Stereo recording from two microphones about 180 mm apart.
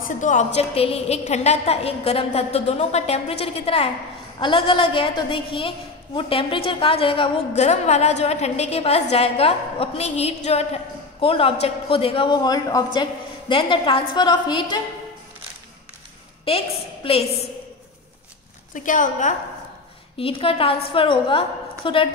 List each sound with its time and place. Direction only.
0.0 s a woman's voice: 45° left (ahead or behind)
0.6 s a woman's voice: 35° left (ahead or behind)
16.4 s a woman's voice: 30° left (ahead or behind)
18.7 s a woman's voice: 45° left (ahead or behind)
20.2 s a woman's voice: 30° left (ahead or behind)